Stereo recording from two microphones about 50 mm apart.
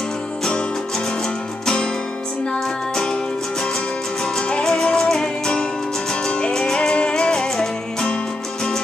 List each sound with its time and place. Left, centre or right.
4.2 s music: centre